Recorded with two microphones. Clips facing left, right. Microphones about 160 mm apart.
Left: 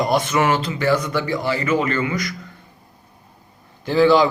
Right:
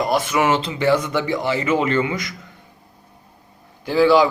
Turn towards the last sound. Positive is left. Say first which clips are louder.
# even
turn(degrees=-10)  # may be behind; listen again after turning